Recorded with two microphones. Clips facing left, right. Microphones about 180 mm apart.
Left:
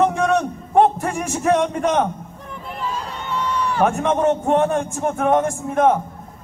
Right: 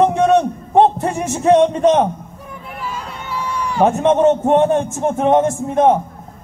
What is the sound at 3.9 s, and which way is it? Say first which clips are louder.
A man's voice: right 5 dB; 25° right (ahead or behind).